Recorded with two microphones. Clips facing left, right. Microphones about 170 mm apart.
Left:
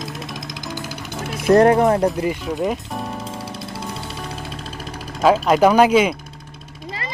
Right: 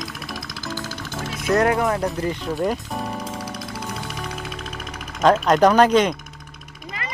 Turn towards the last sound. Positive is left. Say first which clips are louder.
# left 1 dB
turn(degrees=10)  # may be behind; listen again after turning